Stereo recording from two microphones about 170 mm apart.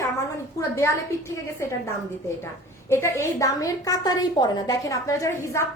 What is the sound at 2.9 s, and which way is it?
A woman's voice, 15° left (ahead or behind).